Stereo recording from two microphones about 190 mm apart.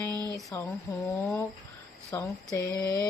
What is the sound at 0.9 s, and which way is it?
Speech, 20° left (ahead or behind).